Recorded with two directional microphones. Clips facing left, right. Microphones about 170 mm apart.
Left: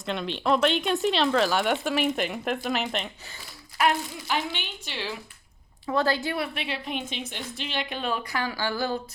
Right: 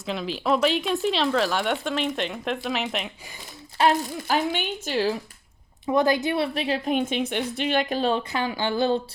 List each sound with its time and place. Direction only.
0.0 s speech: centre (ahead or behind)
3.8 s a woman's voice: 40° right (ahead or behind)
5.8 s a woman's voice: 15° right (ahead or behind)